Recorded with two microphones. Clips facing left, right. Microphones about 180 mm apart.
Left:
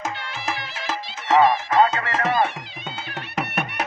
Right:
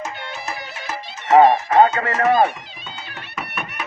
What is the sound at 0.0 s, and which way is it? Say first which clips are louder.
Music: even; 90° left.